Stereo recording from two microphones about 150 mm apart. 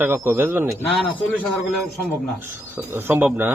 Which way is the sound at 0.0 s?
15° right (ahead or behind).